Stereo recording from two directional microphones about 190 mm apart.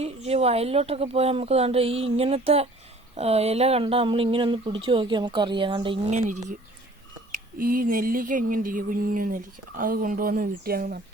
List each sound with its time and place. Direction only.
0.0 s speech: 35° right (ahead or behind)
6.1 s speech: 40° right (ahead or behind)
7.3 s a sound: 50° right (ahead or behind)